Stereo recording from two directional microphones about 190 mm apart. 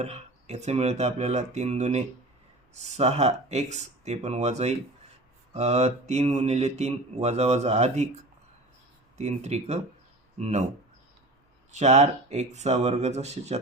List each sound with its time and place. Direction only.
0.0 s speech: 35° right (ahead or behind)
11.7 s speech: 35° right (ahead or behind)